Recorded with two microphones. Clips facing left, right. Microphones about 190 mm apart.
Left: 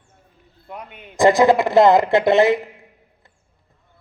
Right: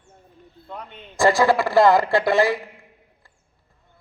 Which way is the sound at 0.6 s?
10° left (ahead or behind).